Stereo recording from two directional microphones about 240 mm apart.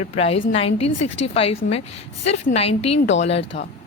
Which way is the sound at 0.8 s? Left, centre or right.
Left.